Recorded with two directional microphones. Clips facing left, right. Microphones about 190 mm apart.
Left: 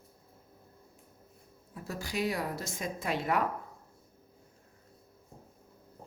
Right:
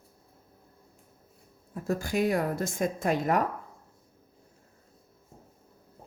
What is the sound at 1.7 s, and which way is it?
A woman's voice, 50° right (ahead or behind).